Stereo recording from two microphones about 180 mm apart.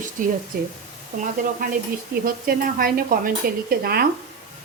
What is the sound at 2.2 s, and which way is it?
A woman's voice, 55° right (ahead or behind).